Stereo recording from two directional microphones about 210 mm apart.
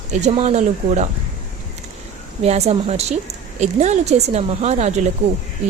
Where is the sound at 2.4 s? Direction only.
30° right (ahead or behind).